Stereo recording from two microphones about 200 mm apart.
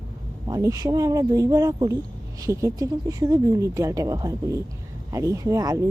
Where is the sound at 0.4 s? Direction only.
15° right (ahead or behind).